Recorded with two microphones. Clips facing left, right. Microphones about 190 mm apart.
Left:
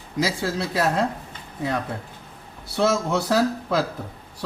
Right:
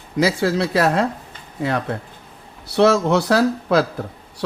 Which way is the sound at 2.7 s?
75° right (ahead or behind).